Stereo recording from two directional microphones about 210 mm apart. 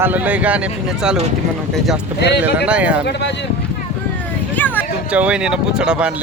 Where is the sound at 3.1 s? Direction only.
55° left (ahead or behind).